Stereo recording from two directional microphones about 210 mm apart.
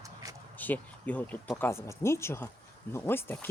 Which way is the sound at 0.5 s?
10° left (ahead or behind).